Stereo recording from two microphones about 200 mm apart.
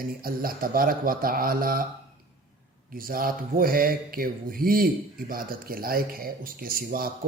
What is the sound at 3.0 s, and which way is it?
Speech, 45° right (ahead or behind).